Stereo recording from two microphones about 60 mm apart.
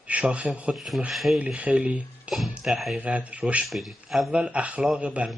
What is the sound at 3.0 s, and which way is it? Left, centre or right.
Speech, right.